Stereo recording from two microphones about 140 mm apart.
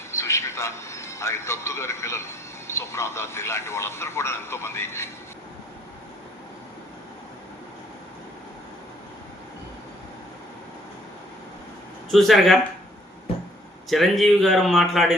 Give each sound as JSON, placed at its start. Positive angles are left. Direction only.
{"t": 0.1, "sound": "a man's voice", "side_deg": 20}
{"t": 12.1, "sound": "speech", "side_deg": 0}
{"t": 13.9, "sound": "speech", "side_deg": 0}